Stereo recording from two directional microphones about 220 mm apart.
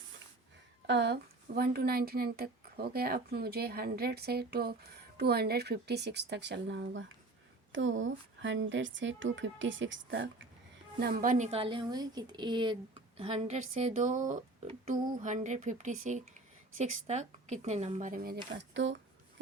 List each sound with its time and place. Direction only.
0.9 s a woman's voice: 50° right (ahead or behind)
11.0 s a woman's voice: 40° right (ahead or behind)
18.5 s speech: 55° right (ahead or behind)